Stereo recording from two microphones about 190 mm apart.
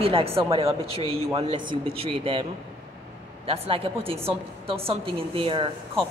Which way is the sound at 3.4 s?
30° right (ahead or behind).